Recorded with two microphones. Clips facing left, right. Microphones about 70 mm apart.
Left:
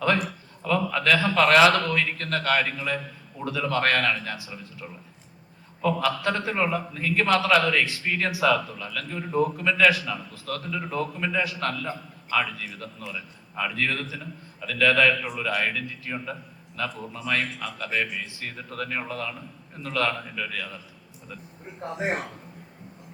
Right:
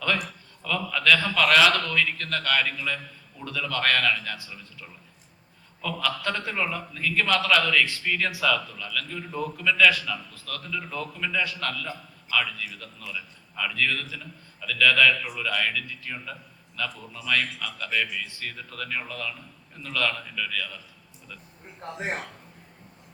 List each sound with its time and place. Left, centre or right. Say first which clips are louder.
0.6 s a man's voice: left 2 dB; left
6.0 s a man's voice: left 3 dB; centre
21.8 s speech: left 4 dB; centre